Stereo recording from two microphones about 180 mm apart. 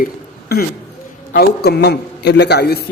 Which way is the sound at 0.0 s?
55° left (ahead or behind).